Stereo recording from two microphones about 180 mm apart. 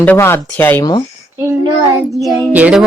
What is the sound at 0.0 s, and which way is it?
Speech, 10° left (ahead or behind).